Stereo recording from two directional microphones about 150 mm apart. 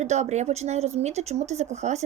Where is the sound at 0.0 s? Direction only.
50° right (ahead or behind).